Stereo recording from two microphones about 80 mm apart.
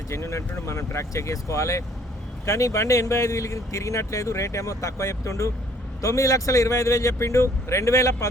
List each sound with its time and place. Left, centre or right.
0.1 s speech: left